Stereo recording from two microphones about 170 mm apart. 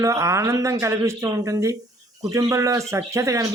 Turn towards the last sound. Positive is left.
turn(degrees=-20)  # may be behind; listen again after turning